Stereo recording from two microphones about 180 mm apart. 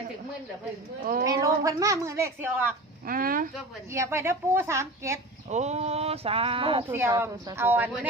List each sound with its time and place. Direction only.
1.2 s speech: 20° right (ahead or behind)
3.1 s speech: 50° right (ahead or behind)
3.9 s speech: 15° right (ahead or behind)
5.5 s speech: 40° right (ahead or behind)
7.1 s speech: 20° right (ahead or behind)